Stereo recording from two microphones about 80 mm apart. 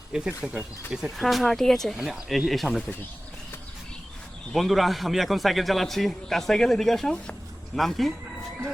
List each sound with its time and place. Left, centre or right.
0.3 s speech: centre
1.0 s a man's voice: centre
4.5 s a man's voice: centre